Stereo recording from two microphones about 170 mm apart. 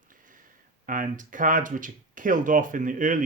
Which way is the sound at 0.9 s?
50° right (ahead or behind).